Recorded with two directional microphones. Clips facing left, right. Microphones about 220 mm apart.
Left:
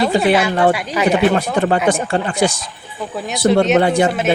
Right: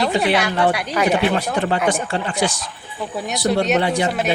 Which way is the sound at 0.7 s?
Centre (ahead or behind).